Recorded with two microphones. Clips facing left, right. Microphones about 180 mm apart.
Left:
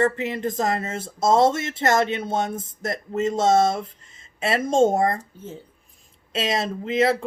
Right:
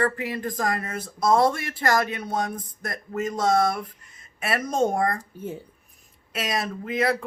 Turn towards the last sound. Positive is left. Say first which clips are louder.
# left 4 dB
turn(degrees=25)  # may be behind; listen again after turning